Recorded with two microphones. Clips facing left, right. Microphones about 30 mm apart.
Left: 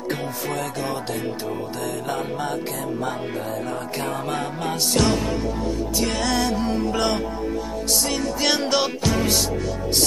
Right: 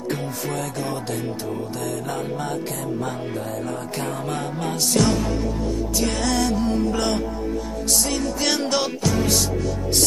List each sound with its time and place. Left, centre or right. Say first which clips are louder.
4.9 s music: right 1 dB; left
5.9 s music: even; centre
9.0 s music: even; left